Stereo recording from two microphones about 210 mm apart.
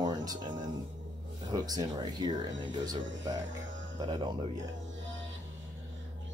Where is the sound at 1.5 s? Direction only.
20° right (ahead or behind).